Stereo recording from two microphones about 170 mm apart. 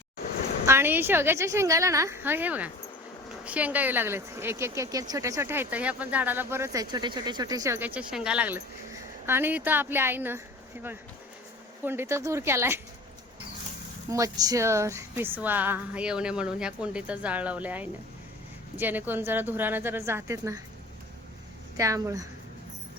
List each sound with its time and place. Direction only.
0.6 s speech: 15° right (ahead or behind)
11.9 s speech: 15° right (ahead or behind)
14.1 s speech: 20° right (ahead or behind)
21.8 s a woman's voice: 20° right (ahead or behind)